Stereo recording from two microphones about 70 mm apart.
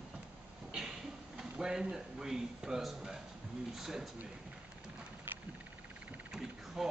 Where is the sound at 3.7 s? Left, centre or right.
Centre.